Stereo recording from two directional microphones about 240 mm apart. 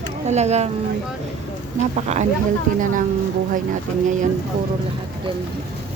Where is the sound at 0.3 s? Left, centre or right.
Right.